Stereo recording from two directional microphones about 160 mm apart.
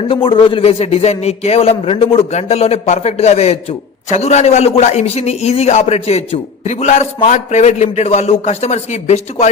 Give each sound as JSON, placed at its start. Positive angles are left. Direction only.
{"t": 0.1, "sound": "a man's voice", "side_deg": 30}